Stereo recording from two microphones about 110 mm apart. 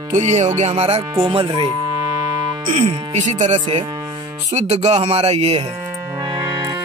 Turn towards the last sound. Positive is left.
turn(degrees=-35)  # may be behind; listen again after turning